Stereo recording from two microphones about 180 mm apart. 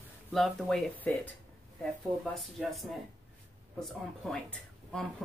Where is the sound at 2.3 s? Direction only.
Centre (ahead or behind).